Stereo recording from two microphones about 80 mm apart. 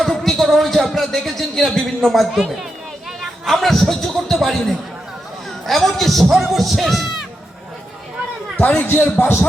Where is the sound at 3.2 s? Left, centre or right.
Centre.